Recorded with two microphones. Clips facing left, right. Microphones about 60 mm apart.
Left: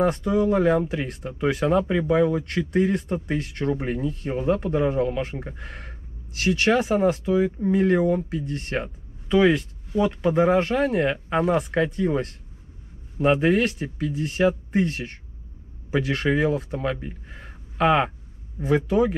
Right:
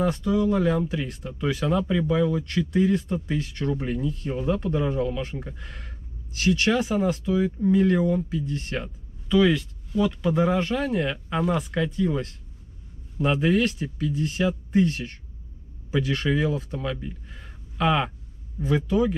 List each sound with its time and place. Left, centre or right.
0.2 s speech: left
14.1 s speech: centre
14.4 s speech: left
16.3 s speech: left